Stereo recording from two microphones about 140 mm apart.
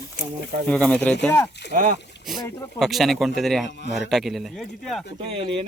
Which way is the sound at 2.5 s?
20° left (ahead or behind).